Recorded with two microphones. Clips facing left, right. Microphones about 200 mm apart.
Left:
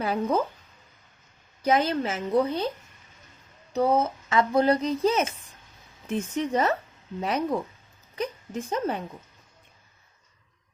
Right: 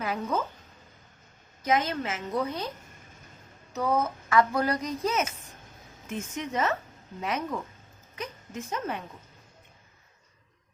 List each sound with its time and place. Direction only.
0.0 s a woman's voice: 35° left (ahead or behind)
1.6 s a woman's voice: 35° left (ahead or behind)
3.7 s a woman's voice: 30° left (ahead or behind)